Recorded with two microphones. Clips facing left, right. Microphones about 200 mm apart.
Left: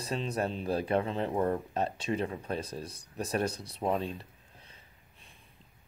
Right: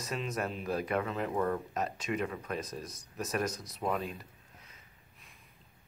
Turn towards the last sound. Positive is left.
turn(degrees=30)  # may be behind; listen again after turning